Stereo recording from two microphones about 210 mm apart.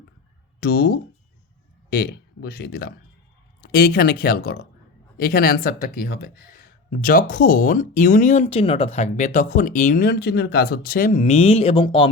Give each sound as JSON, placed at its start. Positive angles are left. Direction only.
{"t": 0.6, "sound": "speech", "side_deg": 45}